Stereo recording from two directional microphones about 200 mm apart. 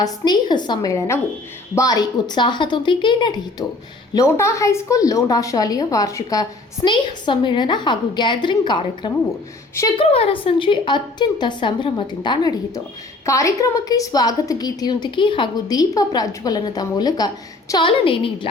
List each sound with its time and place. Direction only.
0.0 s a woman's voice: 20° left (ahead or behind)